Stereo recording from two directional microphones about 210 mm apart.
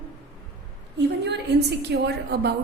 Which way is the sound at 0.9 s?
55° right (ahead or behind).